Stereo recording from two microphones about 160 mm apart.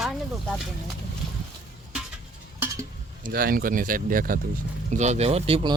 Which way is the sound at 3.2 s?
65° right (ahead or behind).